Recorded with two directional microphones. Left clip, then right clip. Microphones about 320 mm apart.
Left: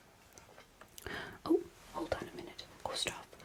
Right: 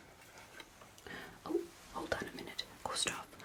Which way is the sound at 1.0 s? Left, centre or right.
Left.